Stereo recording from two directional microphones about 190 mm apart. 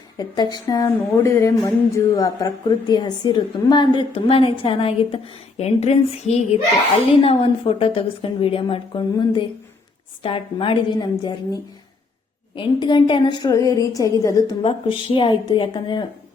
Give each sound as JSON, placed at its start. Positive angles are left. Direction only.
{"t": 0.2, "sound": "a woman's voice", "side_deg": 20}
{"t": 14.6, "sound": "a woman's voice", "side_deg": 30}